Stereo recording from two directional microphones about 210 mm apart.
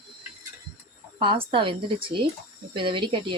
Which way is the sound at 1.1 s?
25° right (ahead or behind).